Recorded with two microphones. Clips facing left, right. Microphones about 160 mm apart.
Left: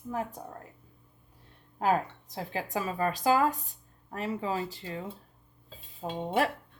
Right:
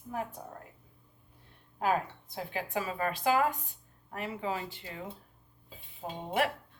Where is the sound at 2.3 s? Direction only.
35° left (ahead or behind).